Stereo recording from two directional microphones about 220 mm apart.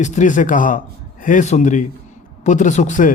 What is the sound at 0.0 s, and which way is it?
A man's voice, 35° left (ahead or behind).